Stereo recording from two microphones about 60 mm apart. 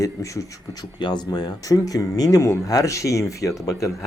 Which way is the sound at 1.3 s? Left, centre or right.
Left.